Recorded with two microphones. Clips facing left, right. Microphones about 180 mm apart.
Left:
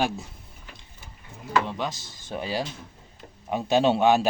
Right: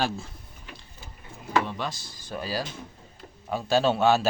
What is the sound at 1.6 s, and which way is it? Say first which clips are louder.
A man's voice: left 2 dB; 15° left (ahead or behind).